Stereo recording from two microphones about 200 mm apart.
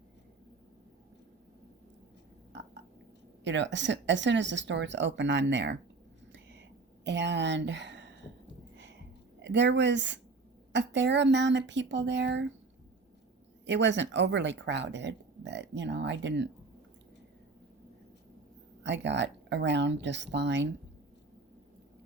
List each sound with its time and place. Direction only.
3.4 s speech: 65° right (ahead or behind)
6.3 s a sound: 60° right (ahead or behind)
9.4 s speech: 60° right (ahead or behind)
13.7 s speech: 65° right (ahead or behind)
18.8 s speech: 60° right (ahead or behind)